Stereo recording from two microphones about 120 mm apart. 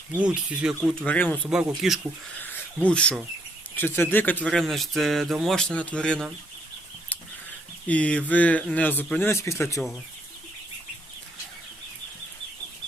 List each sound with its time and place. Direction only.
0.2 s speech: 5° right (ahead or behind)
1.0 s speech: 15° left (ahead or behind)
1.5 s speech: 5° right (ahead or behind)
2.7 s speech: 10° left (ahead or behind)
7.9 s speech: 10° left (ahead or behind)